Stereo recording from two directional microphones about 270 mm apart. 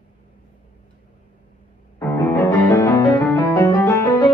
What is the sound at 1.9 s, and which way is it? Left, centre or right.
Music, centre.